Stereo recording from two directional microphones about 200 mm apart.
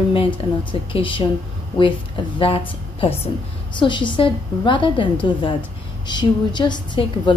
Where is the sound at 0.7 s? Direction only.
25° left (ahead or behind).